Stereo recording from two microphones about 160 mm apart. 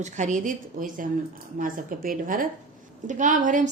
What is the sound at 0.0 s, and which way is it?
A woman's voice, 50° right (ahead or behind).